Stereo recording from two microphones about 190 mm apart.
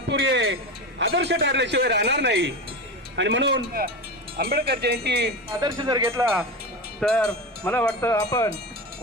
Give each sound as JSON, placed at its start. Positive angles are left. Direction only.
{"t": 0.1, "sound": "music", "side_deg": -70}
{"t": 0.9, "sound": "a man's voice", "side_deg": -70}
{"t": 4.4, "sound": "a man's voice", "side_deg": -55}
{"t": 5.5, "sound": "speech", "side_deg": -20}
{"t": 7.0, "sound": "speech", "side_deg": 5}